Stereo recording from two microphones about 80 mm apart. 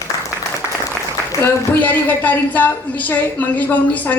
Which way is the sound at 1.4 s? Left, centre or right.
Left.